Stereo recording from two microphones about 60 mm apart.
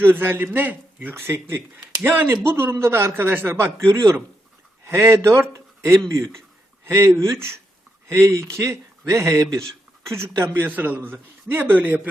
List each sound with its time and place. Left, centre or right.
0.0 s a man's voice: right
1.1 s a man's voice: right
3.8 s speech: right
4.9 s a man's voice: right
10.1 s speech: right
10.5 s a man's voice: right